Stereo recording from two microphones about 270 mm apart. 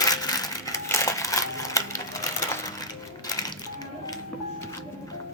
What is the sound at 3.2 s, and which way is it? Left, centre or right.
Music, centre.